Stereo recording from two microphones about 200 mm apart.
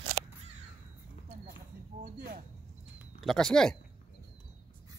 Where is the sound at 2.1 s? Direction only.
45° right (ahead or behind).